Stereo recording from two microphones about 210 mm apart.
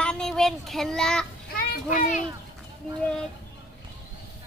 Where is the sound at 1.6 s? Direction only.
40° left (ahead or behind).